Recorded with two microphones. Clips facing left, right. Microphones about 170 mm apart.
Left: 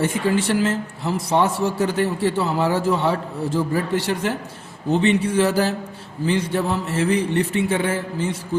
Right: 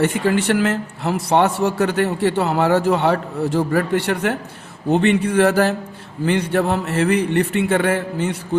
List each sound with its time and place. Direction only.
0.0 s a man's voice: 65° right (ahead or behind)